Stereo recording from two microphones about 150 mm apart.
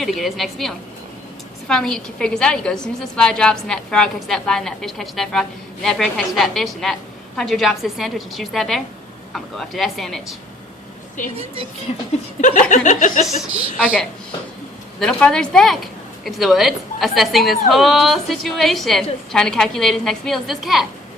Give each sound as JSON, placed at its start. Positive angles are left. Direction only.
{"t": 0.0, "sound": "a woman's voice", "side_deg": 0}
{"t": 11.2, "sound": "chuckle", "side_deg": 60}
{"t": 12.4, "sound": "chuckle", "side_deg": 55}
{"t": 14.9, "sound": "a woman's voice", "side_deg": 5}